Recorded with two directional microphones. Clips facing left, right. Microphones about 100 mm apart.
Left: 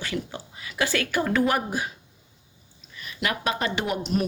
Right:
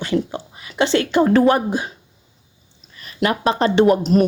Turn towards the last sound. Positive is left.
turn(degrees=-40)  # may be behind; listen again after turning